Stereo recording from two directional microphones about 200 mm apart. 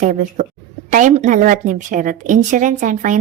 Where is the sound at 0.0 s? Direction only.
40° right (ahead or behind).